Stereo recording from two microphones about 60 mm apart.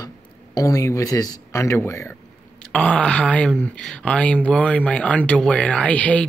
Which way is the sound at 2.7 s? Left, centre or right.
Centre.